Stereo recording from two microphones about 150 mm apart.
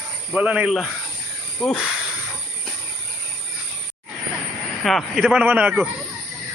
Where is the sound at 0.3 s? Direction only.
10° right (ahead or behind).